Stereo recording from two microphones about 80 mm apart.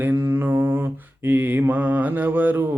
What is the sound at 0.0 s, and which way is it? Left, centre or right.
Mantra, right.